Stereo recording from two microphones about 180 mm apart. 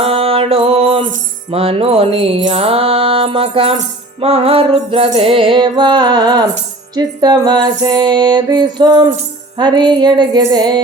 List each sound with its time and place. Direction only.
0.0 s music: 30° right (ahead or behind)